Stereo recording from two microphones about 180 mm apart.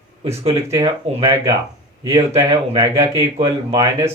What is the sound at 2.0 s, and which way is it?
Speech, 15° right (ahead or behind).